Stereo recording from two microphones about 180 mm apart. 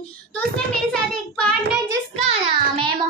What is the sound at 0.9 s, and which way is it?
Child singing, 5° left (ahead or behind).